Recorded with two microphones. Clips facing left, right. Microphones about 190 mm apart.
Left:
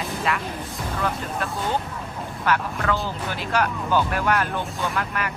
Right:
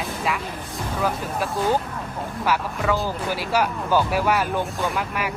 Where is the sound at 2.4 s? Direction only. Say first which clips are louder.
Even; 5° right (ahead or behind).